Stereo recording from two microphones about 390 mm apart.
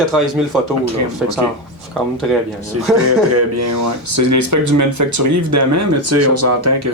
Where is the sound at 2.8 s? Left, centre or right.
Right.